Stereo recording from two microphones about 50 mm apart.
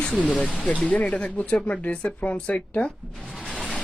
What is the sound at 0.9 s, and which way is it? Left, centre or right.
Speech, left.